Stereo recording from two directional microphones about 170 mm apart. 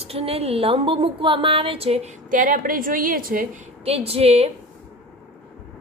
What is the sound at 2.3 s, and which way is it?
A woman's voice, 50° right (ahead or behind).